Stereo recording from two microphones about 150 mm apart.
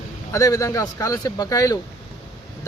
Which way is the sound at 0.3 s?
25° left (ahead or behind).